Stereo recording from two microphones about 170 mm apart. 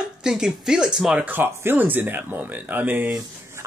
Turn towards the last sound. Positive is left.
turn(degrees=-10)  # may be behind; listen again after turning